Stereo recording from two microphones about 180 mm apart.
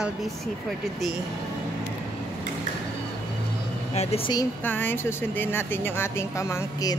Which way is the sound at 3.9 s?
35° left (ahead or behind).